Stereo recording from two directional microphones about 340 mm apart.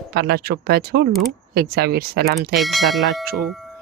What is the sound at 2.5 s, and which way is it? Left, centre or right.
Speech, centre.